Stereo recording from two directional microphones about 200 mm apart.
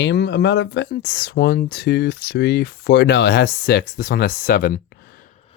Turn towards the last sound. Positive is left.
turn(degrees=50)  # may be behind; listen again after turning